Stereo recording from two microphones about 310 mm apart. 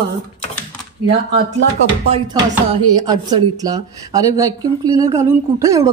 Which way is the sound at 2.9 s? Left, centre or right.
Centre.